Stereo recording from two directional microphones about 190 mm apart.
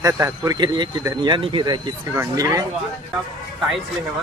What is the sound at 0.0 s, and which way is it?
Speech, 15° right (ahead or behind).